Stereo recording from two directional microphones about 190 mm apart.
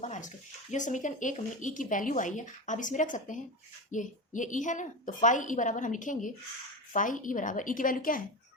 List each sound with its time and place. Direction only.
0.0 s a woman's voice: 40° left (ahead or behind)